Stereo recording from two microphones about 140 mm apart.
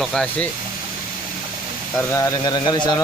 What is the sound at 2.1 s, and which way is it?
Speech, 20° left (ahead or behind).